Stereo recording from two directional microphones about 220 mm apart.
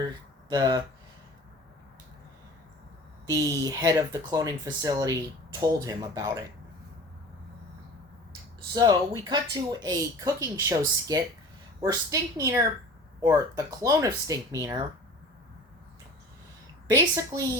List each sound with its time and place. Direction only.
0.0 s a sound: 20° right (ahead or behind)
3.2 s speech: 15° right (ahead or behind)
8.7 s speech: 20° right (ahead or behind)
16.9 s speech: 15° right (ahead or behind)